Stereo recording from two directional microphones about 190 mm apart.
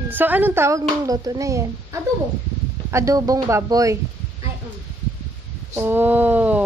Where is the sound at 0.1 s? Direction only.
10° right (ahead or behind).